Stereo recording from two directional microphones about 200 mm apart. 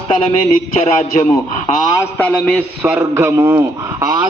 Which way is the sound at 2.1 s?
10° left (ahead or behind).